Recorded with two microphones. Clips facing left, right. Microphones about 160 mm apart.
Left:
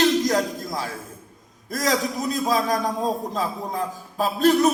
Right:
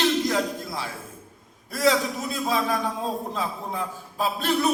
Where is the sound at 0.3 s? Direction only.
40° left (ahead or behind).